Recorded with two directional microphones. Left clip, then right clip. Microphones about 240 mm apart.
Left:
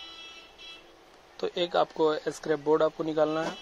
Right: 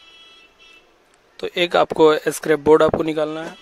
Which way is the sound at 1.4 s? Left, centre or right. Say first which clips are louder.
Right 9 dB; right.